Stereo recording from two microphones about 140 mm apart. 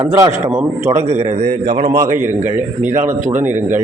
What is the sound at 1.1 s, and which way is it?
Speech, 60° right (ahead or behind).